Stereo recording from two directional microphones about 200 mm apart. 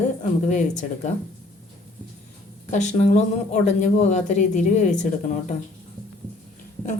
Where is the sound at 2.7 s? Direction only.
35° left (ahead or behind).